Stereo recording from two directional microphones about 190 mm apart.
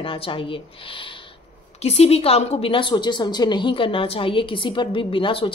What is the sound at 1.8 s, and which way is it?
A woman's voice, 35° left (ahead or behind).